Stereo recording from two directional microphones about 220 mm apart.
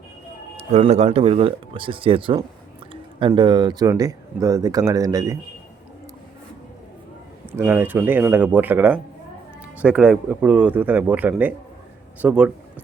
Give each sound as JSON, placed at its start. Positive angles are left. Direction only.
{"t": 0.7, "sound": "speech", "side_deg": -30}
{"t": 7.6, "sound": "speech", "side_deg": -10}